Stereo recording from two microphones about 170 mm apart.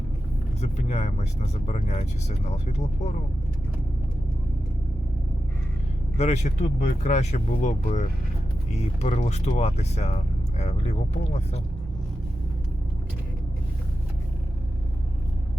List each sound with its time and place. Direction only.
0.6 s speech: 40° left (ahead or behind)
6.1 s speech: 40° left (ahead or behind)